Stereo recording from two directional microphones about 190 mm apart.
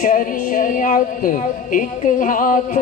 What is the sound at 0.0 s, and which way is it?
Speech, 45° left (ahead or behind).